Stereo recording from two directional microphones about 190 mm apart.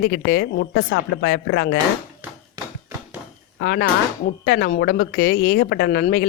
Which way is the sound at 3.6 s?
60° left (ahead or behind).